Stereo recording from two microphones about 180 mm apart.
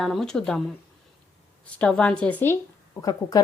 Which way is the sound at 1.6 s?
5° left (ahead or behind).